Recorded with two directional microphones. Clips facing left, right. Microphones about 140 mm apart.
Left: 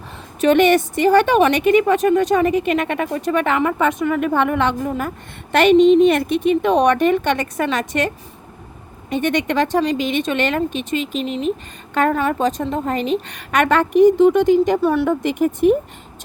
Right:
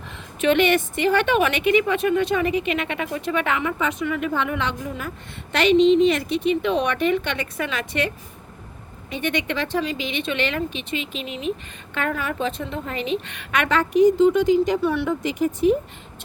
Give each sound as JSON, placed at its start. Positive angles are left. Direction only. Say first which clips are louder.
{"t": 0.4, "sound": "a woman's voice", "louder": "left 5 dB", "side_deg": 40}